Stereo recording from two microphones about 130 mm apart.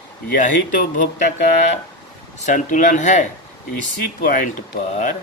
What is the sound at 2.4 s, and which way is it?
Speech, 80° left.